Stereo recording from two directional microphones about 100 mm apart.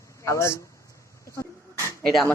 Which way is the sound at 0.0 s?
30° left (ahead or behind).